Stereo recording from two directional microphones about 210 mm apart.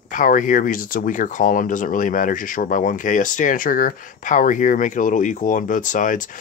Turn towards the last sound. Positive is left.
turn(degrees=40)  # may be behind; listen again after turning